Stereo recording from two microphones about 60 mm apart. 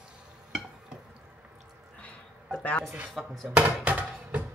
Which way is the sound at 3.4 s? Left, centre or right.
Right.